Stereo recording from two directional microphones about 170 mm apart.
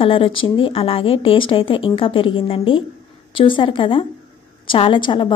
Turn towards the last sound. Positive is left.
turn(degrees=30)  # may be behind; listen again after turning